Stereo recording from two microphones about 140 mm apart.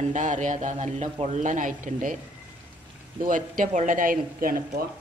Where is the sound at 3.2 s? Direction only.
70° right (ahead or behind); by 4.8 s 90° right.